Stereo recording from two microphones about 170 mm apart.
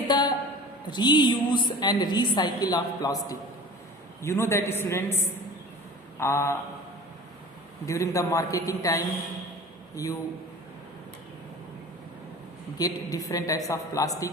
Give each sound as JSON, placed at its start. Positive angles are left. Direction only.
{"t": 0.1, "sound": "a sound", "side_deg": 25}
{"t": 0.9, "sound": "a woman's voice", "side_deg": 25}
{"t": 7.9, "sound": "a woman's voice", "side_deg": 20}
{"t": 12.7, "sound": "a woman's voice", "side_deg": 20}